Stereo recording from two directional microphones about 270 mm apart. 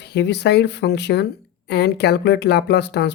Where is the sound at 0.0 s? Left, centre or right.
Left.